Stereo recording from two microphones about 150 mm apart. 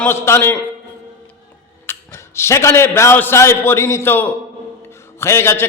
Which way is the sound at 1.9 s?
15° left (ahead or behind).